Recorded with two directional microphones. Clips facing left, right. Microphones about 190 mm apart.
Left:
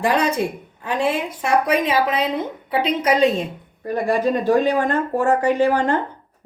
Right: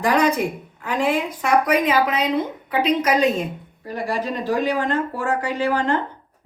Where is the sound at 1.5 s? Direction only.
30° left (ahead or behind).